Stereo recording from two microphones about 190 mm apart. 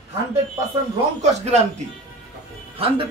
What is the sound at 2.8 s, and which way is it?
Speech, 30° right (ahead or behind).